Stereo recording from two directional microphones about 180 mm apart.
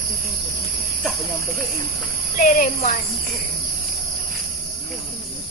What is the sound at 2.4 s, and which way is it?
Speech, 45° left (ahead or behind).